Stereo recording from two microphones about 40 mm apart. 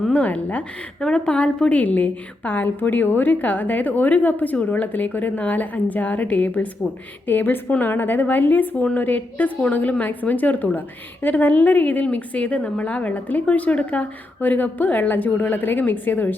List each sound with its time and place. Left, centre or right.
0.1 s a woman's voice: left
0.9 s a woman's voice: centre; by 6.7 s left
7.3 s a woman's voice: left